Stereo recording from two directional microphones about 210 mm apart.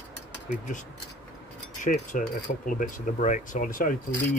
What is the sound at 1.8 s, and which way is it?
Speech, 40° left (ahead or behind).